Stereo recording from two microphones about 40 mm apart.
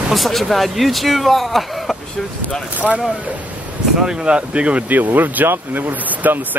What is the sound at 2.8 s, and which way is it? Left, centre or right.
Speech, centre.